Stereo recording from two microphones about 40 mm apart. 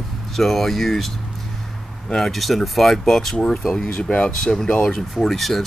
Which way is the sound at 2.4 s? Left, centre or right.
Centre.